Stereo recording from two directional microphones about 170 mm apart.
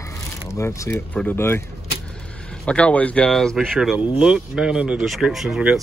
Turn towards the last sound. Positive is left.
turn(degrees=-5)  # may be behind; listen again after turning